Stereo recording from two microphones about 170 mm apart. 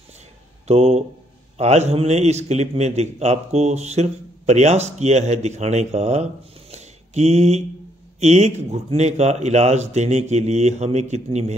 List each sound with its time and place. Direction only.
0.7 s a man's voice: 40° right (ahead or behind)